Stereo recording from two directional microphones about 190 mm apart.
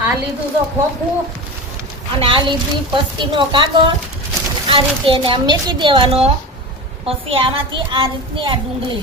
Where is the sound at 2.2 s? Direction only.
25° right (ahead or behind).